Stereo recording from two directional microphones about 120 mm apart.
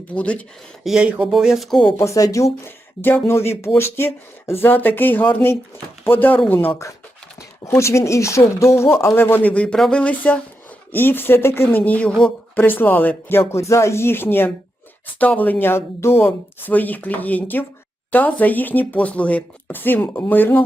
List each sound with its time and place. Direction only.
0.1 s speech: 10° left (ahead or behind)
0.9 s speech: 5° right (ahead or behind)
2.0 s speech: 25° left (ahead or behind)
7.6 s speech: 25° left (ahead or behind)